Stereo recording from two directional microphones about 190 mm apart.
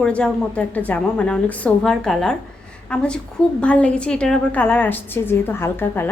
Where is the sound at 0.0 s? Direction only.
5° left (ahead or behind).